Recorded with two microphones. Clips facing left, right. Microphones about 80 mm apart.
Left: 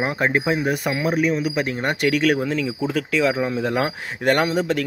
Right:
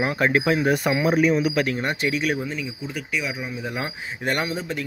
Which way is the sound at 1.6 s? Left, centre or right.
Left.